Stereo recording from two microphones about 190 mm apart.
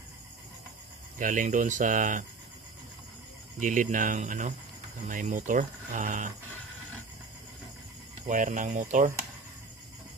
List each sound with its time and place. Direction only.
1.1 s speech: 45° right (ahead or behind)
3.5 s speech: 45° right (ahead or behind)
8.3 s speech: 45° right (ahead or behind)